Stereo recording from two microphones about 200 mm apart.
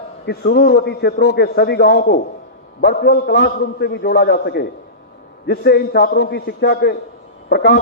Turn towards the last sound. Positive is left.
turn(degrees=55)  # may be behind; listen again after turning